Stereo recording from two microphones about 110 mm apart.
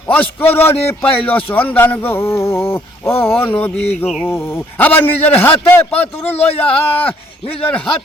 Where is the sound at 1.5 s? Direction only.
15° left (ahead or behind).